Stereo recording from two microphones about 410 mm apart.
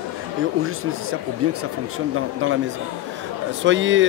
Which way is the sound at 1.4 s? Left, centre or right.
Right.